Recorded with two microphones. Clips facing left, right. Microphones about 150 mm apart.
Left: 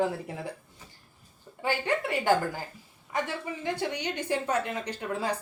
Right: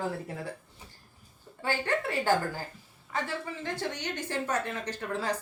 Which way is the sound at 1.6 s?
15° left (ahead or behind).